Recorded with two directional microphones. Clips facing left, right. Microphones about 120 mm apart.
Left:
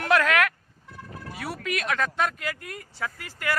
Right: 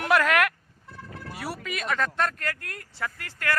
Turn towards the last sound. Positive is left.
turn(degrees=10)  # may be behind; listen again after turning